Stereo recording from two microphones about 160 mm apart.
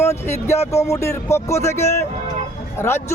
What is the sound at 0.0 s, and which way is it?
A man's voice, 15° left (ahead or behind).